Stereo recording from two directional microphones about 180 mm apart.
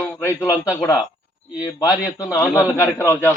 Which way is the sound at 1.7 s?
20° left (ahead or behind).